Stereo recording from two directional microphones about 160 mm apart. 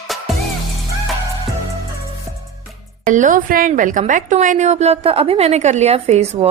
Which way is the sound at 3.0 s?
50° right (ahead or behind).